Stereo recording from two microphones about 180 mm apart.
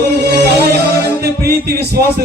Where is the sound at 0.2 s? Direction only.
60° right (ahead or behind).